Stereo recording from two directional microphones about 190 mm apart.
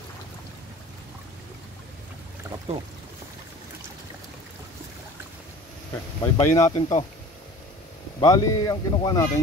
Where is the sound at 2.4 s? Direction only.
15° right (ahead or behind).